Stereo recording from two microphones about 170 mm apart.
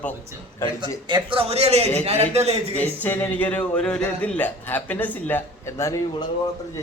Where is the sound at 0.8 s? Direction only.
25° right (ahead or behind).